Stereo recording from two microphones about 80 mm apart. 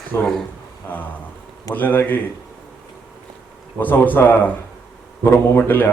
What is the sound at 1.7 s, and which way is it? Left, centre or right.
Speech, left.